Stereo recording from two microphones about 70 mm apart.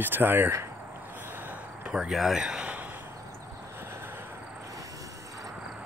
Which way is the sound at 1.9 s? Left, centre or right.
Centre.